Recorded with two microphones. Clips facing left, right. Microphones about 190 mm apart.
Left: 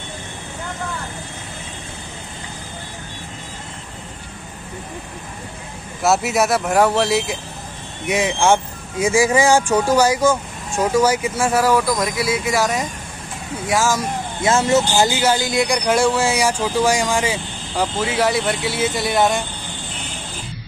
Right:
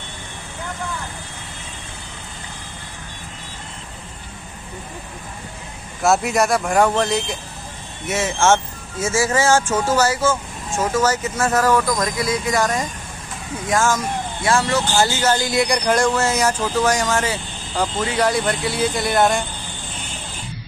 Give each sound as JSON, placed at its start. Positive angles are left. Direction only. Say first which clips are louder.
{"t": 6.0, "sound": "speech", "louder": "even", "side_deg": 0}
{"t": 14.4, "sound": "speech", "louder": "left 4 dB", "side_deg": 20}
{"t": 15.4, "sound": "speech", "louder": "even", "side_deg": 0}